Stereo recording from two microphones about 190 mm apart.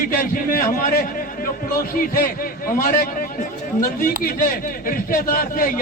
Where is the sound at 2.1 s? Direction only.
50° left (ahead or behind).